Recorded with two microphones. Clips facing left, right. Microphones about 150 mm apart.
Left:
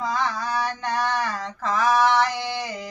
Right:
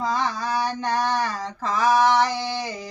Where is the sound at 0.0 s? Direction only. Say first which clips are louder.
Right 1 dB; 35° right (ahead or behind).